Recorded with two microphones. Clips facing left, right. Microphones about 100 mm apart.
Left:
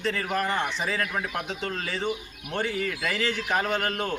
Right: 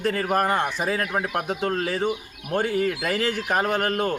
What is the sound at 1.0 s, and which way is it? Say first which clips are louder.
Speech: right 4 dB; 35° right (ahead or behind).